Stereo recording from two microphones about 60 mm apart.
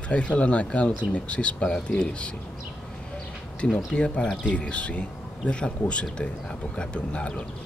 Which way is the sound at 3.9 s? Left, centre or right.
Left.